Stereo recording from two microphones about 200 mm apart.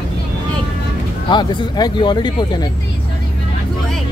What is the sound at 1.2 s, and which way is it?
Speech, 20° left (ahead or behind).